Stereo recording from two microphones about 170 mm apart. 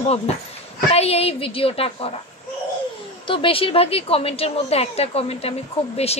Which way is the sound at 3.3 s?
30° left (ahead or behind).